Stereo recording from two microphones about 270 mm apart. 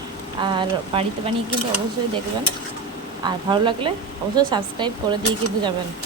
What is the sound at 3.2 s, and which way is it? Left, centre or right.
A woman's voice, centre.